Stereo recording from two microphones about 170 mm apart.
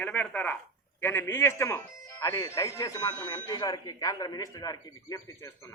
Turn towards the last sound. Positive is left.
turn(degrees=20)  # may be behind; listen again after turning